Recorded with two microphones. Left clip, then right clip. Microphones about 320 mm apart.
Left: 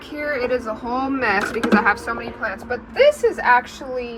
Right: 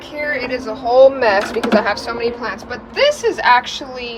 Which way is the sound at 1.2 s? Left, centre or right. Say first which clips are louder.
Right 5 dB; left.